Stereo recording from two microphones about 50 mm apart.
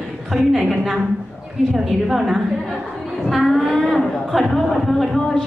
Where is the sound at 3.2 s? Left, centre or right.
Centre.